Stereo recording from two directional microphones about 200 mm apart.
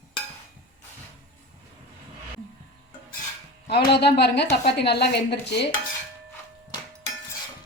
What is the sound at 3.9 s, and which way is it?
A woman's voice, 55° left (ahead or behind).